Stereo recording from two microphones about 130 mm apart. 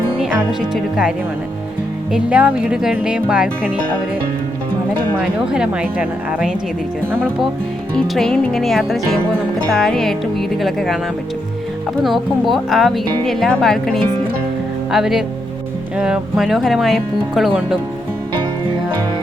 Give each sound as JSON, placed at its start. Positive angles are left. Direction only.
{"t": 0.2, "sound": "speech", "side_deg": -5}
{"t": 2.1, "sound": "speech", "side_deg": -10}
{"t": 5.2, "sound": "speech", "side_deg": -5}
{"t": 7.9, "sound": "speech", "side_deg": 0}
{"t": 12.0, "sound": "speech", "side_deg": 0}